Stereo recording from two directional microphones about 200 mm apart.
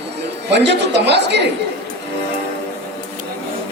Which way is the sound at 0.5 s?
60° right (ahead or behind).